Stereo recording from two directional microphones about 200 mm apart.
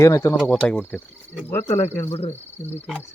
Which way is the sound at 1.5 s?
15° left (ahead or behind).